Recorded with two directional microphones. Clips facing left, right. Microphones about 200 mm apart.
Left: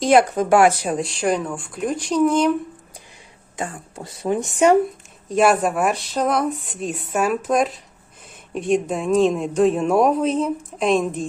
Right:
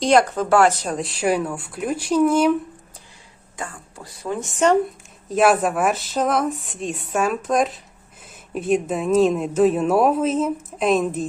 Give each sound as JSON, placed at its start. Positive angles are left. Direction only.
{"t": 0.0, "sound": "speech", "side_deg": 10}
{"t": 3.6, "sound": "speech", "side_deg": 25}
{"t": 5.3, "sound": "speech", "side_deg": 0}